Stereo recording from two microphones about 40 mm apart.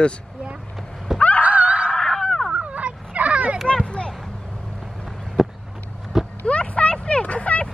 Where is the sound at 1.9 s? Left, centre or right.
Centre.